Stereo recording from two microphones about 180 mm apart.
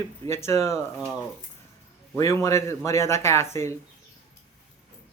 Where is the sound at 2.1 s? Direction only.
15° left (ahead or behind).